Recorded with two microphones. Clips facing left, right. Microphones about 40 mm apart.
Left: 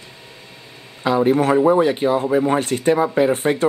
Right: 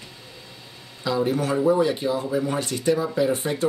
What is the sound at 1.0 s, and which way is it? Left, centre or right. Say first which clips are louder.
Speech: left 7 dB; left.